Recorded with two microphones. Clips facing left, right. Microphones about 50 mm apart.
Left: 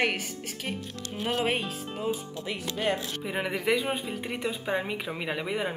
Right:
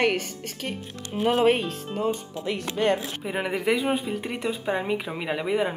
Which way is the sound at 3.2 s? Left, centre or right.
Centre.